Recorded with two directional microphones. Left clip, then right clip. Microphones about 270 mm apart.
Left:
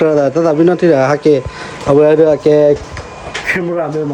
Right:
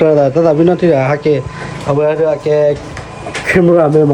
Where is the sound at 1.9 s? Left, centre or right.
Left.